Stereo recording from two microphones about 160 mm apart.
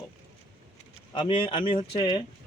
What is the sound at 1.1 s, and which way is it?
Speech, 30° left (ahead or behind).